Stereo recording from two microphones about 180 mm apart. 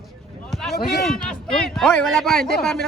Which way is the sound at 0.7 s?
65° left (ahead or behind).